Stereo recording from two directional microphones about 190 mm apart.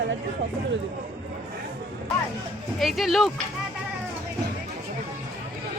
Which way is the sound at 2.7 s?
Centre (ahead or behind).